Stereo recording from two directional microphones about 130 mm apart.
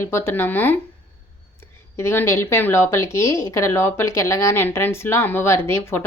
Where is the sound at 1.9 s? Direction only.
20° left (ahead or behind).